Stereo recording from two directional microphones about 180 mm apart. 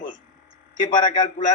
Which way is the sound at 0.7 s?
45° left (ahead or behind).